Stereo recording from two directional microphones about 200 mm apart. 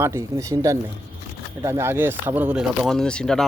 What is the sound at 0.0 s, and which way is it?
Speech, 15° right (ahead or behind).